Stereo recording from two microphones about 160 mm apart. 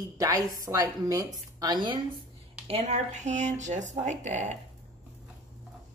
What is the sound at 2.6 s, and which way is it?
Speech, 45° right (ahead or behind).